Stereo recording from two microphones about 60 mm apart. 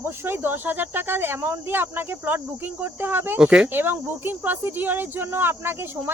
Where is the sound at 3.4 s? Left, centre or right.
Centre.